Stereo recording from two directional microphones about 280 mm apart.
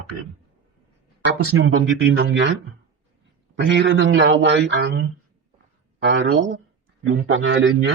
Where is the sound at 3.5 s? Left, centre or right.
Right.